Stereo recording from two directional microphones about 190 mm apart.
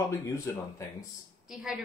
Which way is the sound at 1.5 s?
5° right (ahead or behind).